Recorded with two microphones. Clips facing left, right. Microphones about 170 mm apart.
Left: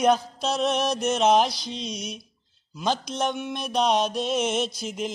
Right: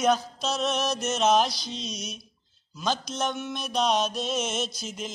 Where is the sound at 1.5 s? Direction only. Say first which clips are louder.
Left 3 dB; 55° left (ahead or behind).